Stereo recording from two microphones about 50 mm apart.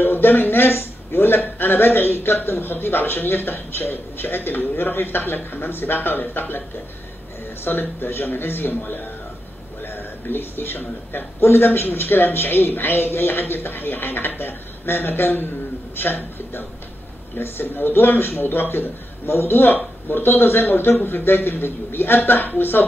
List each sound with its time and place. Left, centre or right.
0.0 s a man's voice: left
7.6 s a man's voice: left